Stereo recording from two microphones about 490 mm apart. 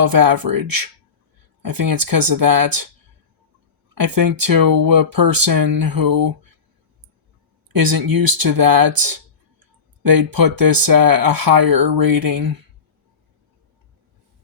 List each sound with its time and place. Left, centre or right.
0.0 s speech: right
3.9 s speech: right
7.7 s speech: right